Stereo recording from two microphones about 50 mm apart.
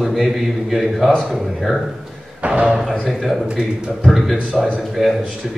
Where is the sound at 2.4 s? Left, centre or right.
Centre.